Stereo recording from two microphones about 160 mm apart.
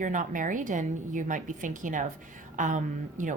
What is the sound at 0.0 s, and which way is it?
A woman's voice, 55° right (ahead or behind).